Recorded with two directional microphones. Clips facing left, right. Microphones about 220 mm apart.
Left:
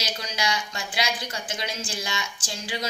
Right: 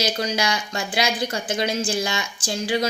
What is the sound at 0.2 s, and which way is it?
Speech, 50° right (ahead or behind).